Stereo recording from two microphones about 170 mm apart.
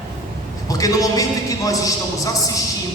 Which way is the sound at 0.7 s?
20° left (ahead or behind).